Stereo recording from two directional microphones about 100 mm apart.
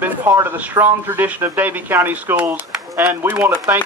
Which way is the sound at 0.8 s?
40° right (ahead or behind).